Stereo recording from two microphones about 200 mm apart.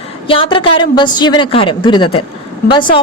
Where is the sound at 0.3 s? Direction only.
25° left (ahead or behind).